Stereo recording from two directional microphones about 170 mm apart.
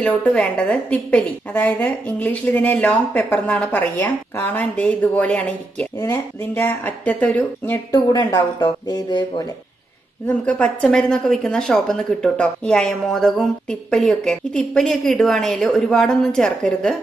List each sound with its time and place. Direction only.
0.0 s a woman's voice: 5° left (ahead or behind)
7.9 s speech: 25° left (ahead or behind)
10.2 s speech: 5° left (ahead or behind)